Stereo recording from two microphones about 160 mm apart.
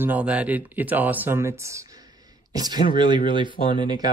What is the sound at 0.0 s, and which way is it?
Speech, 10° right (ahead or behind).